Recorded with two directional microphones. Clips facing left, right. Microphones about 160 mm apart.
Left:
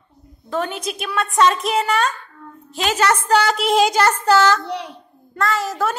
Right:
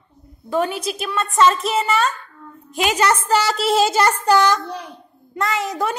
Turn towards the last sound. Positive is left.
turn(degrees=-20)  # may be behind; listen again after turning